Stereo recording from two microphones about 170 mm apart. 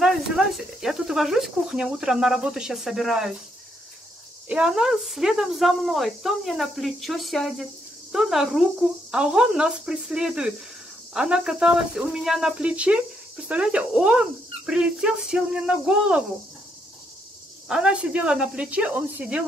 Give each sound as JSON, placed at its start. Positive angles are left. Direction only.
{"t": 0.0, "sound": "speech", "side_deg": -5}
{"t": 4.5, "sound": "speech", "side_deg": -5}
{"t": 17.6, "sound": "speech", "side_deg": -5}